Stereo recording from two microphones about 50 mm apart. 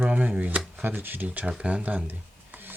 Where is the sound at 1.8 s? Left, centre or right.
Right.